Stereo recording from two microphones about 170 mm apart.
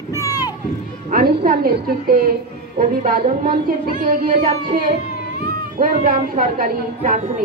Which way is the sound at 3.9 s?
55° right (ahead or behind).